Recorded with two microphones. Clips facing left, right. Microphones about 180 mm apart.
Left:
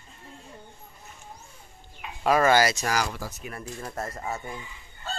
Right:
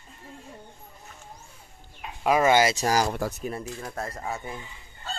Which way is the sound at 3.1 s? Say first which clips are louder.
Right 7 dB; 60° right (ahead or behind).